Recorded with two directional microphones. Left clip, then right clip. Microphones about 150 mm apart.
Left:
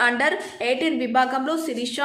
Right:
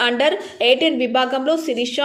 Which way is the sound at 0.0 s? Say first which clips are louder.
Right 3 dB; 10° right (ahead or behind).